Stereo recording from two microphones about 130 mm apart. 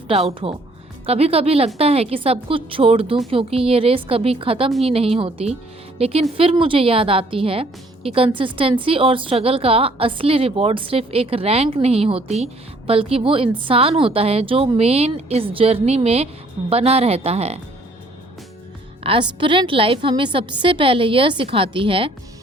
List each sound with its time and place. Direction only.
0.1 s a woman's voice: 50° right (ahead or behind)
19.0 s a woman's voice: 40° right (ahead or behind)